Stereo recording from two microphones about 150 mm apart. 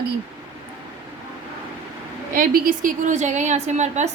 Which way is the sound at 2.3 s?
70° right (ahead or behind).